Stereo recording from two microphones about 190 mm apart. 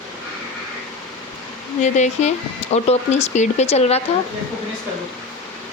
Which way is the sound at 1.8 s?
40° left (ahead or behind).